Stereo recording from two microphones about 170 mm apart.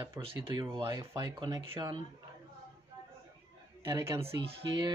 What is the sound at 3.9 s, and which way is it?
Speech, 15° right (ahead or behind).